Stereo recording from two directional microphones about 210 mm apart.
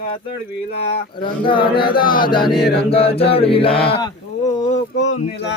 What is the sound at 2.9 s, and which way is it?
Mantra, 25° left (ahead or behind).